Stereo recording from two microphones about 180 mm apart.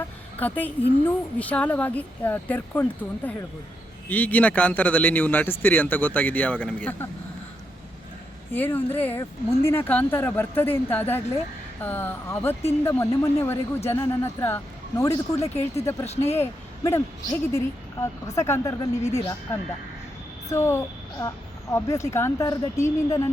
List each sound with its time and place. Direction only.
0.3 s a woman's voice: 10° left (ahead or behind)
8.5 s a woman's voice: 10° left (ahead or behind)
20.5 s a woman's voice: 15° left (ahead or behind)